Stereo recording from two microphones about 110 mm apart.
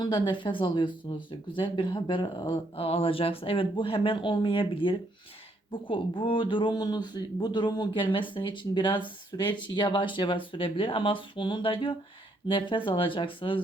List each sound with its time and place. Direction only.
0.0 s speech: 50° left (ahead or behind)